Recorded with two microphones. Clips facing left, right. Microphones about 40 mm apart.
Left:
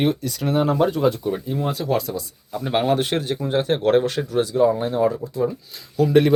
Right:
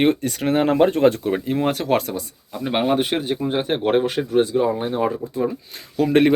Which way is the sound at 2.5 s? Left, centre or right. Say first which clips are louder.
Even; centre.